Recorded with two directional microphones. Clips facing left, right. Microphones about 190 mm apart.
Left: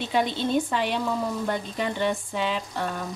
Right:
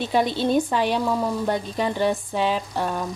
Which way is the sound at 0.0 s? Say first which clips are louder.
Right 3 dB; 40° right (ahead or behind).